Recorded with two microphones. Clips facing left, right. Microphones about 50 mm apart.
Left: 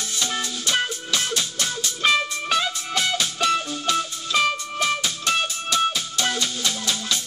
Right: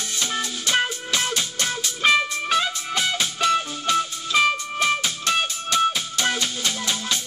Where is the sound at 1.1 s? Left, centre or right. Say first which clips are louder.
Even; centre.